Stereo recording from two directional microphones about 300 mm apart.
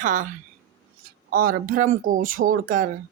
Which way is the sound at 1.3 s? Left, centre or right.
Right.